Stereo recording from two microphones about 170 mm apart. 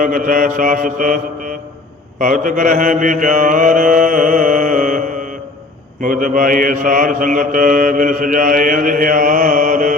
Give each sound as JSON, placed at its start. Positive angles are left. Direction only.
{"t": 0.0, "sound": "mantra", "side_deg": -50}